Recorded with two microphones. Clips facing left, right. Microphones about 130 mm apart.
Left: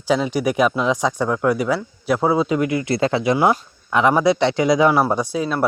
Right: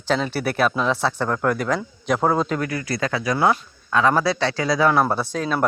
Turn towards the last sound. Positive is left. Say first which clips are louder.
# left 2 dB
turn(degrees=10)  # may be behind; listen again after turning